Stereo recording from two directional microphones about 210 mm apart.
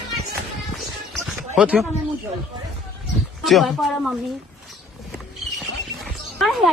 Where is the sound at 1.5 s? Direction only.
5° right (ahead or behind).